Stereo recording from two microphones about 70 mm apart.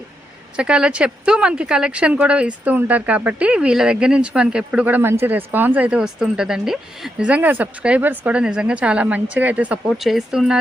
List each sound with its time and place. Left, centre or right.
0.5 s speech: centre
4.9 s speech: right
6.0 s speech: centre
7.3 s speech: right
10.0 s speech: centre